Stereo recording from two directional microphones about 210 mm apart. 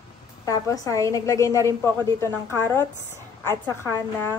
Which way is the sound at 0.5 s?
15° left (ahead or behind).